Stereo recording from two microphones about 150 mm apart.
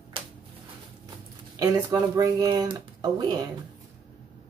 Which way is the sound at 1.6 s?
25° right (ahead or behind).